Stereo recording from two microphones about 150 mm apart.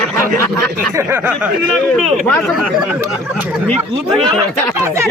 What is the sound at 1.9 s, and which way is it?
Speech, centre (ahead or behind).